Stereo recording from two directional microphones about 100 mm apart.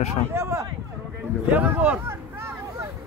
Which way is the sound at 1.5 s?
15° right (ahead or behind).